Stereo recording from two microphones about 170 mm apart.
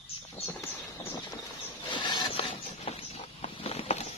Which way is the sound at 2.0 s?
25° left (ahead or behind).